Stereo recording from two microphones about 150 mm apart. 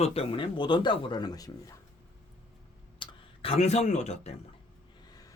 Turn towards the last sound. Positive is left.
turn(degrees=25)  # may be behind; listen again after turning